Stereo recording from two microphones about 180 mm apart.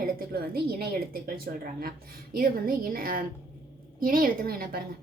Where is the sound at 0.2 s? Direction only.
60° right (ahead or behind).